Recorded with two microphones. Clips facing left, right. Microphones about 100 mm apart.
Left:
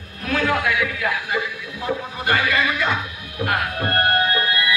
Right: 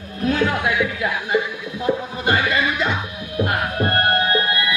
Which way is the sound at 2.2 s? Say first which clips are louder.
Right 1 dB; 25° right (ahead or behind).